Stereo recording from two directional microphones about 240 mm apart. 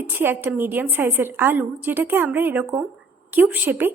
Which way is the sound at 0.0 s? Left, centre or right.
Centre.